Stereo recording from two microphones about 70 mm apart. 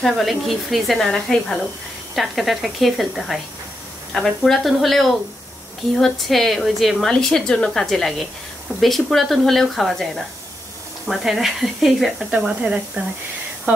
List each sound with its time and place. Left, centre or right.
0.0 s a woman's voice: centre
12.3 s speech: centre